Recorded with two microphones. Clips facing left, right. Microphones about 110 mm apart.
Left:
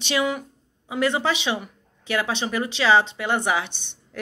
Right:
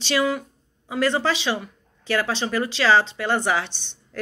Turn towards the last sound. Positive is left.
turn(degrees=15)  # may be behind; listen again after turning